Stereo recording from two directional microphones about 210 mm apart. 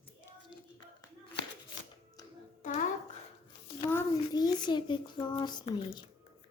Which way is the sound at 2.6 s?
35° left (ahead or behind).